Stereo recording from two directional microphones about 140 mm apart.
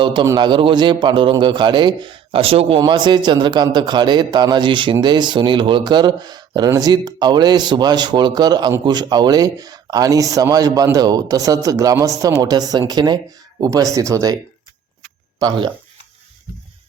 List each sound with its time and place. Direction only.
0.0 s a man's voice: 35° right (ahead or behind)
15.4 s a man's voice: 35° right (ahead or behind)